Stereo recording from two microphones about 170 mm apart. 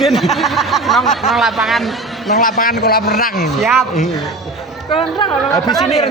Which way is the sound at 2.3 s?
60° left (ahead or behind).